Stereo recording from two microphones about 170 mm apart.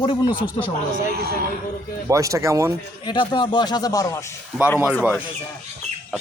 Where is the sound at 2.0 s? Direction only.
20° right (ahead or behind).